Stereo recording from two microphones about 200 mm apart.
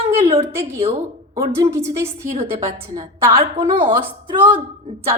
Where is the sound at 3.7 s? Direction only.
25° right (ahead or behind).